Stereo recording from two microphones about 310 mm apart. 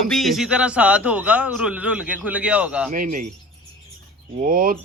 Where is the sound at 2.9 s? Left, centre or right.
Right.